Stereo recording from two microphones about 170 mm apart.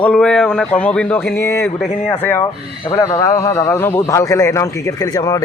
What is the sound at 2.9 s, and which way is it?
A man's voice, 20° left (ahead or behind).